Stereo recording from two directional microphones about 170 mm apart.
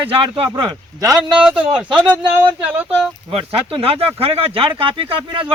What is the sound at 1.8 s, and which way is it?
Speech, 5° right (ahead or behind).